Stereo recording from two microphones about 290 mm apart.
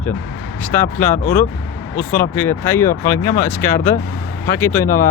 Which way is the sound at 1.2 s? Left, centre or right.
Left.